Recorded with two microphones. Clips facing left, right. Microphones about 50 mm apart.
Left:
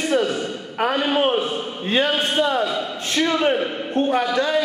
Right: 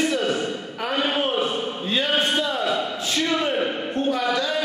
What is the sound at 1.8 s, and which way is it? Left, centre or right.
A man's voice, left.